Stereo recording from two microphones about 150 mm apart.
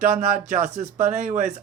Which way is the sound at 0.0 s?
60° right (ahead or behind).